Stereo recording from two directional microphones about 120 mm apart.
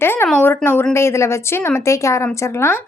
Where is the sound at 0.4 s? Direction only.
20° left (ahead or behind).